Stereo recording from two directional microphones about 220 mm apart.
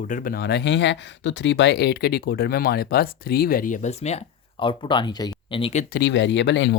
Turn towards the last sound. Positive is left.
turn(degrees=55)  # may be behind; listen again after turning